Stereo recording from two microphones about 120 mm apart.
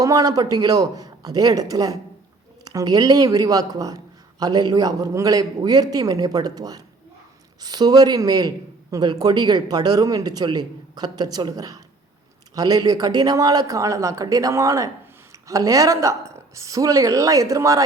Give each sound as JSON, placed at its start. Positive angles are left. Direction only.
{"t": 0.0, "sound": "a woman's voice", "side_deg": -30}